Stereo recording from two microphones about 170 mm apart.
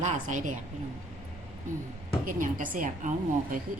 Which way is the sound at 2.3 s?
50° right (ahead or behind).